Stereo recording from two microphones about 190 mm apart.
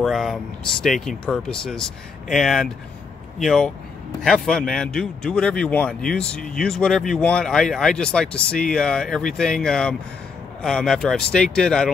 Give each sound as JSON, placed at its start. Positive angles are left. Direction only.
{"t": 0.0, "sound": "speech", "side_deg": 0}